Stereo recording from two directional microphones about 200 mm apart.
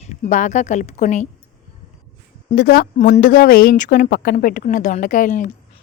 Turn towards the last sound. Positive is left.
turn(degrees=40)  # may be behind; listen again after turning